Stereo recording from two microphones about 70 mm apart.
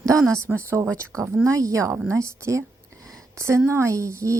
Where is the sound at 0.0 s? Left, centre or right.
Right.